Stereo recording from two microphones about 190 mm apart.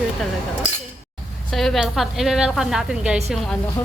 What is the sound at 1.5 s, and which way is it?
A woman's voice, centre (ahead or behind).